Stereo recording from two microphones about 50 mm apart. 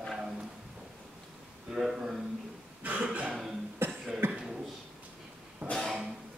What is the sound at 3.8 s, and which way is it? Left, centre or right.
Cough, right.